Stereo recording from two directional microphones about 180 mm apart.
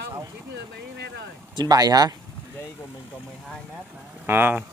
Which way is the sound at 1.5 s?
20° right (ahead or behind).